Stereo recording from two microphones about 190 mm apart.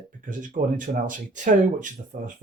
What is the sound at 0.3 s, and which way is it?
Speech, 45° right (ahead or behind).